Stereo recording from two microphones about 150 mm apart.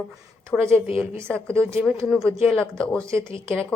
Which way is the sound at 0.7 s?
40° left (ahead or behind).